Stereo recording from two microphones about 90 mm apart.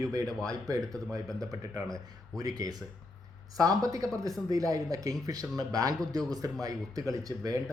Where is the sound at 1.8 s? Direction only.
45° right (ahead or behind).